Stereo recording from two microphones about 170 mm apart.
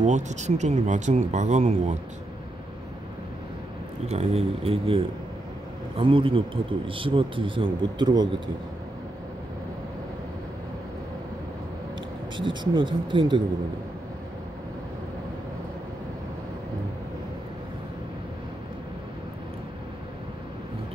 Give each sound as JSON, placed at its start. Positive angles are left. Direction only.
{"t": 0.0, "sound": "speech", "side_deg": -45}
{"t": 4.1, "sound": "a man's voice", "side_deg": -40}
{"t": 12.4, "sound": "speech", "side_deg": -30}